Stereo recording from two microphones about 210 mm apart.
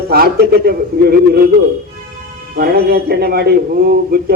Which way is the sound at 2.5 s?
45° right (ahead or behind).